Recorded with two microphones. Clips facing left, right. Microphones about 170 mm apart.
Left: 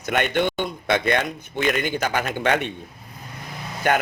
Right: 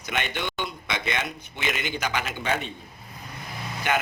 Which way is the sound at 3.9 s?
45° left (ahead or behind).